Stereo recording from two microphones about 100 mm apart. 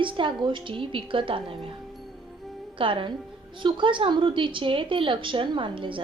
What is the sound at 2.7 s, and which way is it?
A woman's voice, 60° right (ahead or behind).